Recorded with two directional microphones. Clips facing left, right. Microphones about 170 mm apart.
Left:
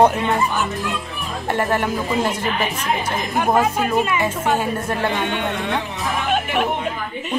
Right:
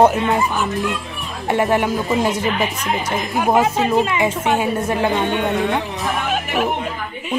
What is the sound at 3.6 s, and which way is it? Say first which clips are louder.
Speech: right 2 dB; 20° right (ahead or behind).